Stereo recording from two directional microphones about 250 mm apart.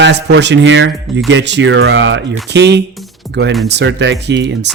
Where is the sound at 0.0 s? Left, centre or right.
Right.